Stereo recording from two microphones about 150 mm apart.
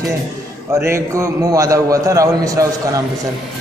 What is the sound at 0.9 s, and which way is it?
A man's voice, 20° right (ahead or behind).